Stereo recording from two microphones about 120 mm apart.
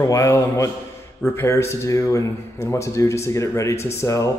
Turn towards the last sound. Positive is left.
turn(degrees=25)  # may be behind; listen again after turning